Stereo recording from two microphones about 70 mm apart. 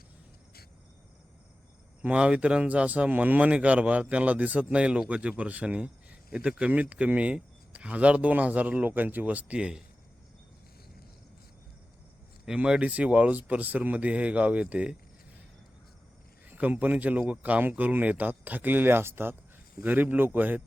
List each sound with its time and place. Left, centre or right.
2.0 s speech: centre
12.5 s speech: centre
16.5 s speech: right